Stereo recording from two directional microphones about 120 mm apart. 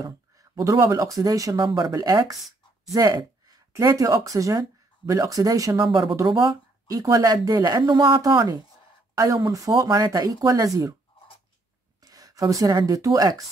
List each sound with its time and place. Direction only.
0.0 s speech: 30° right (ahead or behind)
12.0 s speech: 30° right (ahead or behind)